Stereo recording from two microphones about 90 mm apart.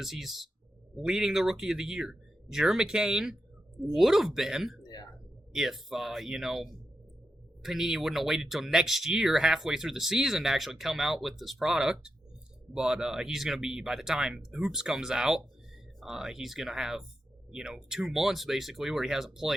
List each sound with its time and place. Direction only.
0.0 s speech: centre (ahead or behind)
4.8 s a sound: 50° left (ahead or behind)
5.5 s speech: 5° right (ahead or behind)